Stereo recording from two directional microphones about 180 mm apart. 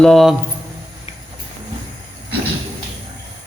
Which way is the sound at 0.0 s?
Centre (ahead or behind).